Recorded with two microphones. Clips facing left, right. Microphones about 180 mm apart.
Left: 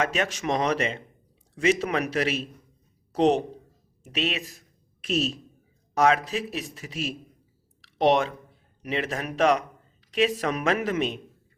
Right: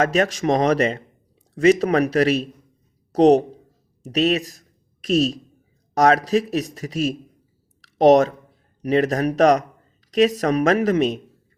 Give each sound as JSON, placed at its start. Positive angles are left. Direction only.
{"t": 0.0, "sound": "a man's voice", "side_deg": -40}
{"t": 7.8, "sound": "a sound", "side_deg": -40}
{"t": 8.8, "sound": "a man's voice", "side_deg": -40}